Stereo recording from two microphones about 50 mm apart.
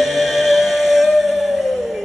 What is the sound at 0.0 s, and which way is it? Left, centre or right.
Music, centre.